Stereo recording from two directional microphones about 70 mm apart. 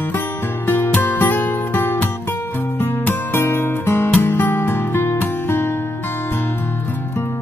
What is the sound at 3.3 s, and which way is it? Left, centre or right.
Music, left.